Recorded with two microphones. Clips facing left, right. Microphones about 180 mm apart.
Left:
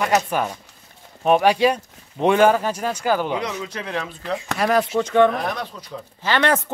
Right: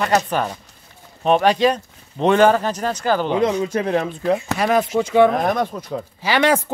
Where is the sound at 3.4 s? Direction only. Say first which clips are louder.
Right 9 dB; 30° right (ahead or behind).